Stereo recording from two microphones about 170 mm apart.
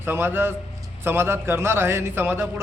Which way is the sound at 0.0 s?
15° right (ahead or behind).